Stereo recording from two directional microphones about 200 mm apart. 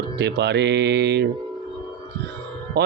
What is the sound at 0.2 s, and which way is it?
Speech, 55° right (ahead or behind).